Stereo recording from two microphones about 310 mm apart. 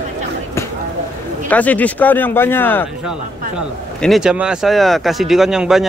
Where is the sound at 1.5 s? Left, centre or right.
Centre.